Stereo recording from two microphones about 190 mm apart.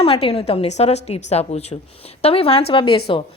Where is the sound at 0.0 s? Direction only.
30° left (ahead or behind).